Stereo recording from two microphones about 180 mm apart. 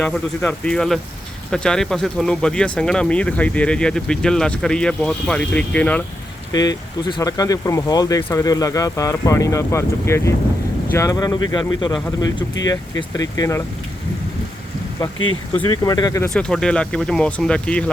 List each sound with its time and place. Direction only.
0.0 s speech: 5° left (ahead or behind)
6.5 s speech: 20° left (ahead or behind)
12.6 s speech: 20° left (ahead or behind)
15.5 s speech: 20° left (ahead or behind)
16.3 s speech: 5° left (ahead or behind)